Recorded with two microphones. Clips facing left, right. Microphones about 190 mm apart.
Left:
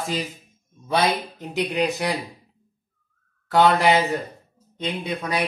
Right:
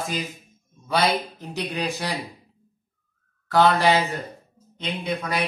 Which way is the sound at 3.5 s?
20° left (ahead or behind).